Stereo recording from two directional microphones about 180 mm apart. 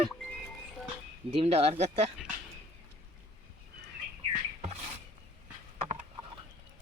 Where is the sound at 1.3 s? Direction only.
35° right (ahead or behind).